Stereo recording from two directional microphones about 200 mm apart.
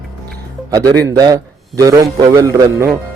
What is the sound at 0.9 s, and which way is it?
A man's voice, 20° right (ahead or behind).